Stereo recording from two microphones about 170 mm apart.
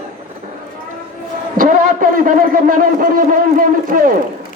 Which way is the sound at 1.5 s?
55° right (ahead or behind).